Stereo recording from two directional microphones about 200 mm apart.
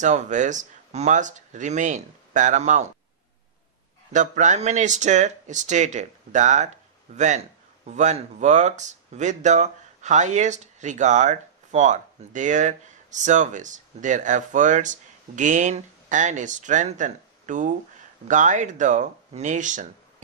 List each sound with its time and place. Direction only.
0.0 s speech: 35° right (ahead or behind)
4.1 s speech: 40° right (ahead or behind)